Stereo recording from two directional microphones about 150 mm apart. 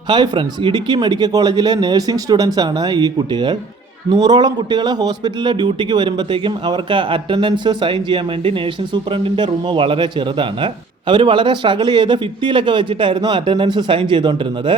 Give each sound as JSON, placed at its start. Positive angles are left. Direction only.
{"t": 0.1, "sound": "a man's voice", "side_deg": -30}